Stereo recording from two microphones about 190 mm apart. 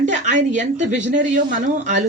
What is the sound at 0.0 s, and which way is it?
A woman's voice, 40° right (ahead or behind).